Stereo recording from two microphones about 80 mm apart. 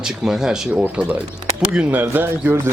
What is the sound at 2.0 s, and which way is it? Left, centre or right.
Speech, right.